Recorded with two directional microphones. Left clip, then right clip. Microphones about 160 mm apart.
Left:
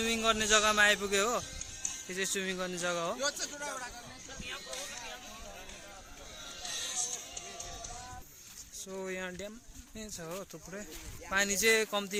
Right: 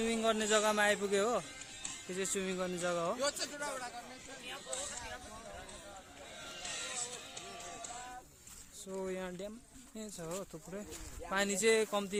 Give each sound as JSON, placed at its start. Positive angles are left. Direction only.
{"t": 0.0, "sound": "a man's voice", "side_deg": -5}
{"t": 3.2, "sound": "speech", "side_deg": -45}
{"t": 6.6, "sound": "a sound", "side_deg": 90}
{"t": 8.9, "sound": "a man's voice", "side_deg": -5}
{"t": 11.3, "sound": "speech", "side_deg": -10}